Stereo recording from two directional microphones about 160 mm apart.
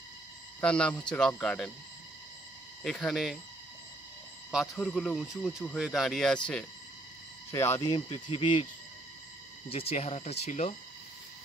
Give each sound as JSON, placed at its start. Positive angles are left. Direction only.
{"t": 0.6, "sound": "speech", "side_deg": 5}
{"t": 2.8, "sound": "speech", "side_deg": 5}
{"t": 4.5, "sound": "speech", "side_deg": 0}
{"t": 5.5, "sound": "speech", "side_deg": 15}
{"t": 5.8, "sound": "speech", "side_deg": 0}
{"t": 7.5, "sound": "speech", "side_deg": 15}
{"t": 8.3, "sound": "speech", "side_deg": 35}
{"t": 9.7, "sound": "speech", "side_deg": 40}